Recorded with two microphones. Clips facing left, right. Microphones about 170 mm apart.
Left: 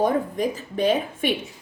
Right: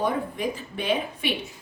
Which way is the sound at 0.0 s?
40° left (ahead or behind).